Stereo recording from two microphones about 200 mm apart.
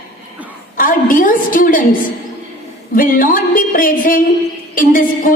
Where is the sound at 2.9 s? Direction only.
45° left (ahead or behind).